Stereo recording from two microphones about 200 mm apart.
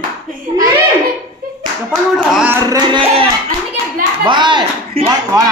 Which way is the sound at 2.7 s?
25° right (ahead or behind).